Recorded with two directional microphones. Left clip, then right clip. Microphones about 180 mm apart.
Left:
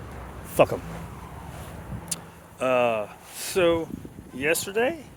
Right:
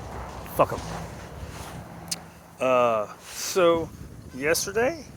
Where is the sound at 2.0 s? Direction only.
Centre (ahead or behind).